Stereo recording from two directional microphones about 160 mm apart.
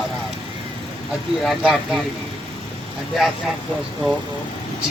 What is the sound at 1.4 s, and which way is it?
Speech, centre (ahead or behind).